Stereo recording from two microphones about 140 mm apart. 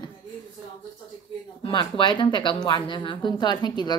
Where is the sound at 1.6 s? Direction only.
35° left (ahead or behind).